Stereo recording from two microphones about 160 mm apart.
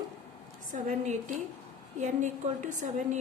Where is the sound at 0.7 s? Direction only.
50° right (ahead or behind).